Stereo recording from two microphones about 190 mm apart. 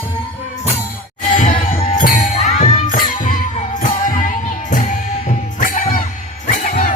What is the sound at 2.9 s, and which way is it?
Music, 45° left (ahead or behind).